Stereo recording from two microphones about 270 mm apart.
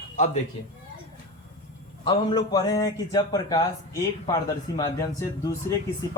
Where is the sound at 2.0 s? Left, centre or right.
Centre.